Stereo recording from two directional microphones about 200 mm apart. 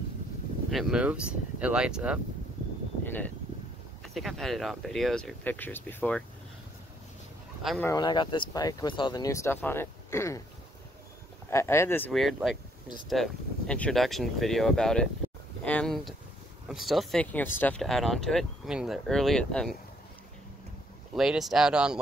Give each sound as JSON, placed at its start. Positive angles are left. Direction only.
{"t": 0.7, "sound": "speech", "side_deg": 0}
{"t": 4.0, "sound": "speech", "side_deg": 0}
{"t": 7.8, "sound": "speech", "side_deg": 20}
{"t": 11.5, "sound": "speech", "side_deg": 15}
{"t": 12.1, "sound": "speech", "side_deg": 0}
{"t": 21.1, "sound": "speech", "side_deg": 0}